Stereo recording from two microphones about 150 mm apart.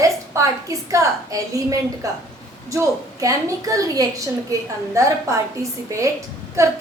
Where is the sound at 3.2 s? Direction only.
20° right (ahead or behind).